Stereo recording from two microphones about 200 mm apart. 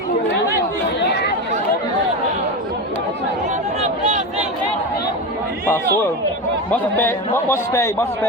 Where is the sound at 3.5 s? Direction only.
35° right (ahead or behind).